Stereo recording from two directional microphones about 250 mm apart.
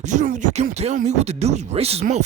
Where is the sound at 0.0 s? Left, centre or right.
Right.